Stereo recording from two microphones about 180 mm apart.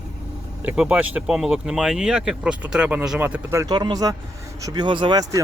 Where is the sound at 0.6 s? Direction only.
5° right (ahead or behind).